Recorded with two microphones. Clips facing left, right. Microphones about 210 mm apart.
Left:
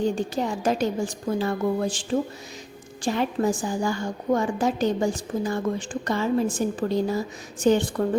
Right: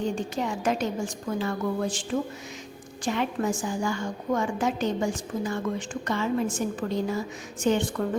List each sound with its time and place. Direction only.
0.0 s a woman's voice: 35° left (ahead or behind)